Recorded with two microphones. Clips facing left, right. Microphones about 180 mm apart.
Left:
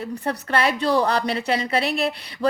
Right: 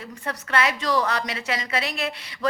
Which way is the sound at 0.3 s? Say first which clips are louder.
Left 2 dB; 30° left (ahead or behind).